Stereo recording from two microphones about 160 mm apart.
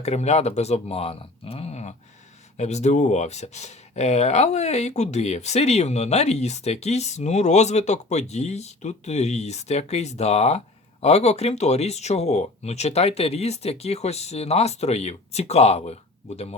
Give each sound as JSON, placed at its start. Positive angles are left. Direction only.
{"t": 0.0, "sound": "speech", "side_deg": 45}